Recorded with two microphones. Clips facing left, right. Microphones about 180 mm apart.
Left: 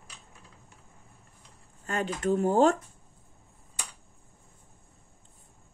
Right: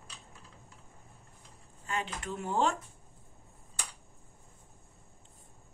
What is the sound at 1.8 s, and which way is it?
Speech, 45° left (ahead or behind).